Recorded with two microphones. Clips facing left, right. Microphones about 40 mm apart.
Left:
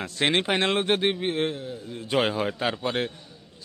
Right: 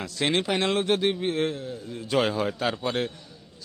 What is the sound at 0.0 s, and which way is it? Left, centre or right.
A man's voice, left.